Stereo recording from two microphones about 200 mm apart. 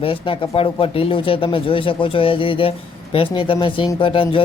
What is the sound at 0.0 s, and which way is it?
Speech, 25° left (ahead or behind).